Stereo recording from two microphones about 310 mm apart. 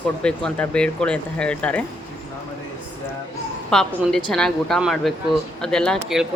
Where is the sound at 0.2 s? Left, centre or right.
Centre.